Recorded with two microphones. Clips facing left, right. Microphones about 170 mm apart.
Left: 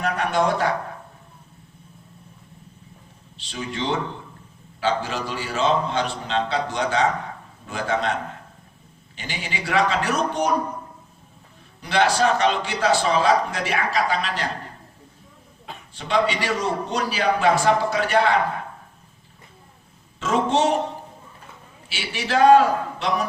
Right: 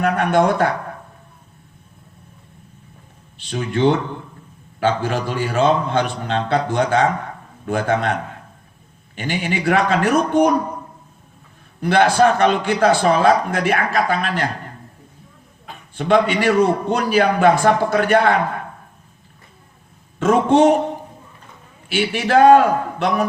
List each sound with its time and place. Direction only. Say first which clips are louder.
0.0 s a sound: right 6 dB; 55° right (ahead or behind)
3.3 s a man's voice: right 8 dB; 55° right (ahead or behind)
9.1 s a man's voice: right 9 dB; 55° right (ahead or behind)
11.8 s a man's voice: right 6 dB; 55° right (ahead or behind)
16.0 s a man's voice: right 6 dB; 55° right (ahead or behind)
20.1 s a man's voice: right 7 dB; 55° right (ahead or behind)
21.8 s a man's voice: right 9 dB; 55° right (ahead or behind)